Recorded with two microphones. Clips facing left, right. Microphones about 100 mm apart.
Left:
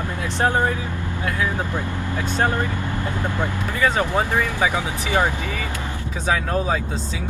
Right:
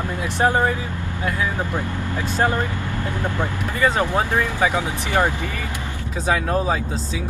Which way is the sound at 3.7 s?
15° right (ahead or behind).